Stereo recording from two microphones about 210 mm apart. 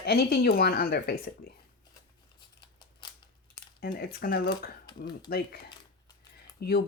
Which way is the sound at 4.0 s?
45° left (ahead or behind).